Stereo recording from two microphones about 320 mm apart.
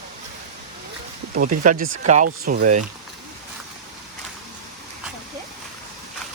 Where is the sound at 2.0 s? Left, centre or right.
Right.